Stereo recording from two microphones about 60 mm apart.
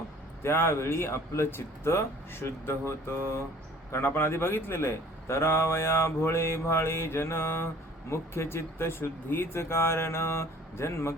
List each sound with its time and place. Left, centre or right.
0.4 s speech: left